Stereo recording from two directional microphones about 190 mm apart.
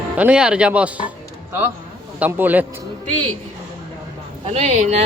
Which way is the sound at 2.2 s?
10° right (ahead or behind).